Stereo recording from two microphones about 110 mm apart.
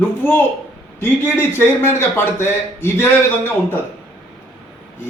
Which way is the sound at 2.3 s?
20° left (ahead or behind).